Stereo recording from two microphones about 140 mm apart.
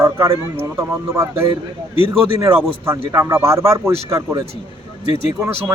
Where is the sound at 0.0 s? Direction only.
20° right (ahead or behind).